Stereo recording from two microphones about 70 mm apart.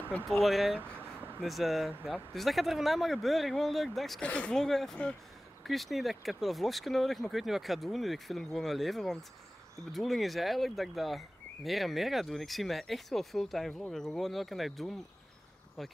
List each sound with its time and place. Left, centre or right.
0.3 s speech: centre
0.9 s a sound: right
1.4 s speech: centre
4.2 s speech: centre
4.6 s speech: centre